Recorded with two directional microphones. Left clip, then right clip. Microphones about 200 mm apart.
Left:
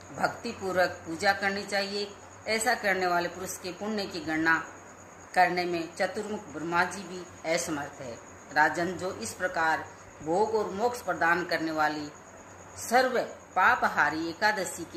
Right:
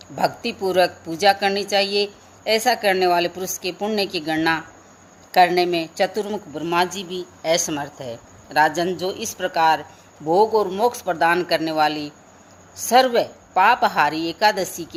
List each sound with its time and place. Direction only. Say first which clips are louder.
0.2 s a woman's voice: right 9 dB; 50° right (ahead or behind)